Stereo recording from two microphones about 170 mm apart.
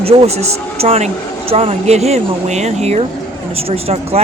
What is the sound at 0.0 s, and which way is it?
Speech, 35° right (ahead or behind).